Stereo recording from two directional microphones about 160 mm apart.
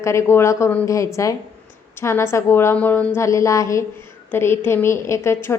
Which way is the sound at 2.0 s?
15° left (ahead or behind).